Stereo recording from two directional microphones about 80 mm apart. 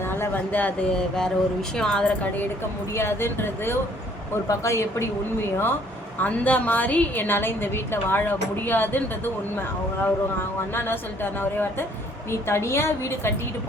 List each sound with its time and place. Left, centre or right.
0.0 s a sound: left
0.5 s a woman's voice: centre
2.9 s a woman's voice: left
6.1 s a woman's voice: centre